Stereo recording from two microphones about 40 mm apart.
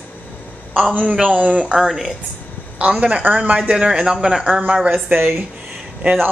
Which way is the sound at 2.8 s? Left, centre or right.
Right.